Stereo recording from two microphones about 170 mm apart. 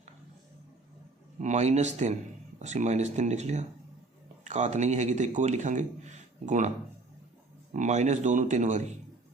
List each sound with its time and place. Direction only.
1.4 s speech: 45° right (ahead or behind)
7.7 s speech: 45° right (ahead or behind)